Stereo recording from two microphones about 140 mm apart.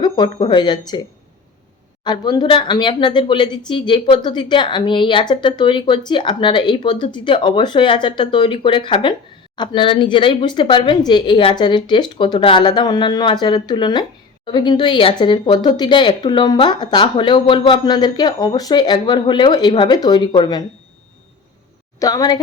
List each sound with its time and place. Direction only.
0.0 s speech: 30° left (ahead or behind)
2.0 s speech: 30° left (ahead or behind)
21.9 s a woman's voice: 25° left (ahead or behind)